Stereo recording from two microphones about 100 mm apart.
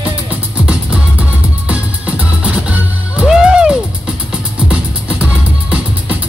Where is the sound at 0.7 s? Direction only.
10° right (ahead or behind).